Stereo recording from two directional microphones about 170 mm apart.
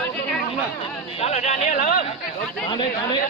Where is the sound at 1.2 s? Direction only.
40° left (ahead or behind).